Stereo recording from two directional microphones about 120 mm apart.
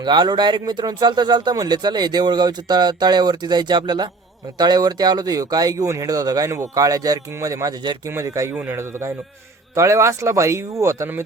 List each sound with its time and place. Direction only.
0.0 s speech: 40° right (ahead or behind)
8.1 s speech: 25° right (ahead or behind)